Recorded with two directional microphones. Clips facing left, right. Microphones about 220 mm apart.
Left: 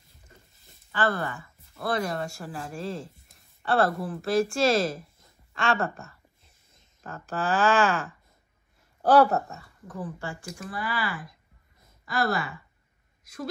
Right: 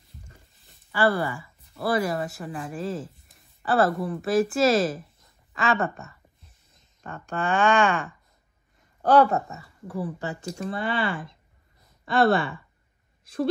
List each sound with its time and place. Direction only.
0.9 s speech: 10° right (ahead or behind)
9.8 s speech: 15° right (ahead or behind)
10.4 s speech: 30° right (ahead or behind)